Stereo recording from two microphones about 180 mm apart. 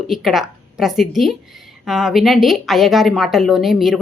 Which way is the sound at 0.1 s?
Centre (ahead or behind).